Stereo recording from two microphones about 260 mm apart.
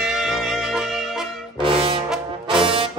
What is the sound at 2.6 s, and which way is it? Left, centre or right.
Music, centre.